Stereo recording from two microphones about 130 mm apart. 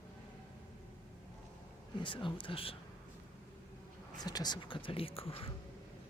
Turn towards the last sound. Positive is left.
turn(degrees=45)  # may be behind; listen again after turning